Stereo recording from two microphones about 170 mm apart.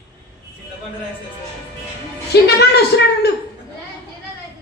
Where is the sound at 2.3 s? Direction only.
75° left (ahead or behind).